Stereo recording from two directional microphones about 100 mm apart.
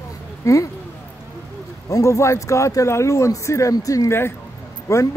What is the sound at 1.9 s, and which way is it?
A man's voice, 30° left (ahead or behind).